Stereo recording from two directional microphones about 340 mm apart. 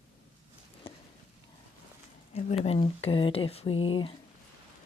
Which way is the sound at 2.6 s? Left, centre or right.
Centre.